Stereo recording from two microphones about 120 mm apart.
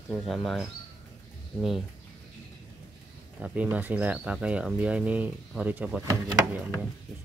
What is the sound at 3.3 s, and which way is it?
Speech, 10° right (ahead or behind).